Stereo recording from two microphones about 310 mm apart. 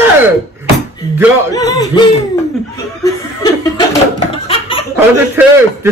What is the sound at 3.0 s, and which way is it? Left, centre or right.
Chuckle, centre.